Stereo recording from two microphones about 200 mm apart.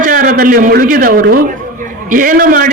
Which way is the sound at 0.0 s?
45° right (ahead or behind).